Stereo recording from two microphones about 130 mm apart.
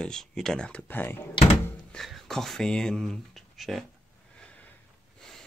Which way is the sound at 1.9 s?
Centre (ahead or behind).